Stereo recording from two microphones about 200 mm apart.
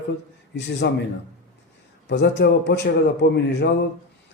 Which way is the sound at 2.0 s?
60° left (ahead or behind).